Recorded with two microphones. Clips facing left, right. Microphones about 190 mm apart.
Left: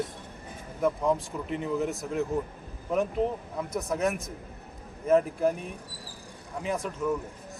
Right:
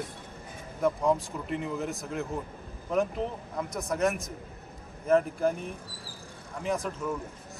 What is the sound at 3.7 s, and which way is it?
A man's voice, 5° left (ahead or behind).